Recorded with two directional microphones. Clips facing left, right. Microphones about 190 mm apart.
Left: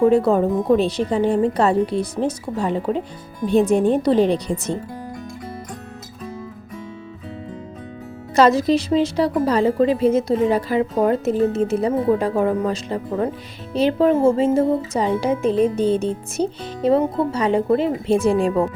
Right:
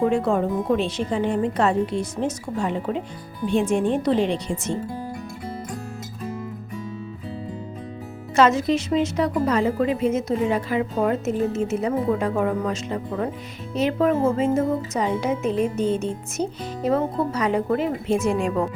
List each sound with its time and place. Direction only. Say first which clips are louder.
0.1 s speech: left 5 dB; 35° left (ahead or behind)
8.4 s speech: left 3 dB; 35° left (ahead or behind)